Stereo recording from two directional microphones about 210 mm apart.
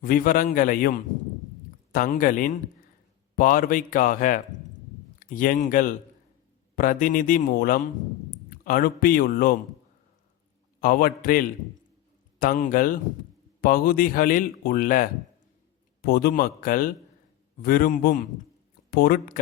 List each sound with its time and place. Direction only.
0.0 s speech: 45° left (ahead or behind)
10.8 s speech: 45° left (ahead or behind)